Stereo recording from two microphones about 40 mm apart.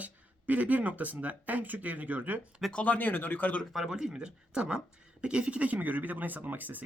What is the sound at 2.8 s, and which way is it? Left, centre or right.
Speech, left.